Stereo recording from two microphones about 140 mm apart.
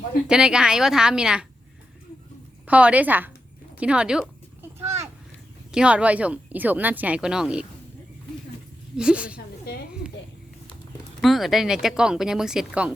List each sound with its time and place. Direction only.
0.3 s speech: 5° right (ahead or behind)
2.6 s speech: 10° right (ahead or behind)
4.8 s a sound: 20° right (ahead or behind)
5.7 s speech: 10° right (ahead or behind)
9.0 s speech: 5° right (ahead or behind)
11.2 s speech: centre (ahead or behind)